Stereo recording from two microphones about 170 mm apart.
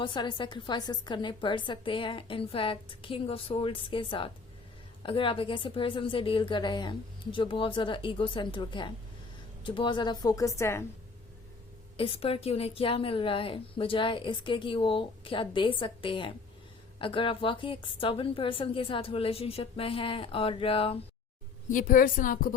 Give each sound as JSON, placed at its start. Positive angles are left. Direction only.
{"t": 0.0, "sound": "a woman's voice", "side_deg": 25}
{"t": 11.9, "sound": "a woman's voice", "side_deg": 35}
{"t": 21.7, "sound": "a woman's voice", "side_deg": 50}